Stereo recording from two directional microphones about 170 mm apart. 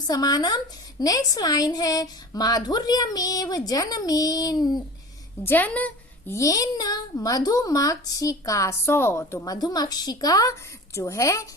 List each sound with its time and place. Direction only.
0.1 s a woman's voice: 20° left (ahead or behind)
5.4 s a woman's voice: 10° left (ahead or behind)